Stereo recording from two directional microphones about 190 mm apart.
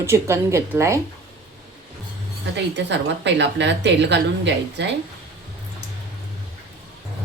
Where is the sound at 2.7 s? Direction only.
65° right (ahead or behind).